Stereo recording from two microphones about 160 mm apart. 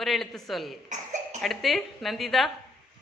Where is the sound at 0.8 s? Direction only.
50° right (ahead or behind).